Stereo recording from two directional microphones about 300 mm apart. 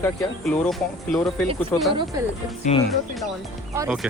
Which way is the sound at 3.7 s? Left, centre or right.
Centre.